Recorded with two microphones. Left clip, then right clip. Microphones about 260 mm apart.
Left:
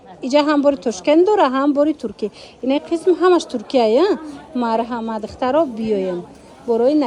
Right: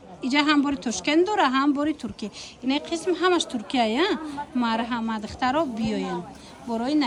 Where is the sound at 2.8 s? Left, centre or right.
Centre.